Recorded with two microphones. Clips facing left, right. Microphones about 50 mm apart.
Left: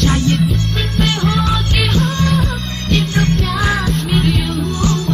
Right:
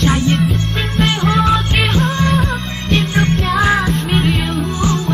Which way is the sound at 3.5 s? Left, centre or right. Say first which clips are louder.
Right 3 dB; centre.